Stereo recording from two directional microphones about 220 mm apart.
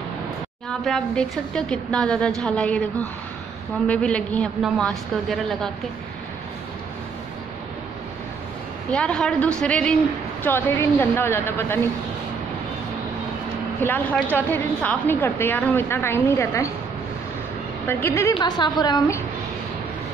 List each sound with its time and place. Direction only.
0.7 s a woman's voice: centre (ahead or behind)
8.9 s a woman's voice: 5° left (ahead or behind)
13.7 s a woman's voice: 10° left (ahead or behind)
17.8 s a woman's voice: 10° left (ahead or behind)